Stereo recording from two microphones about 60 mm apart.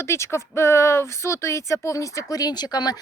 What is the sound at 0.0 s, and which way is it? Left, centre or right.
Speech, left.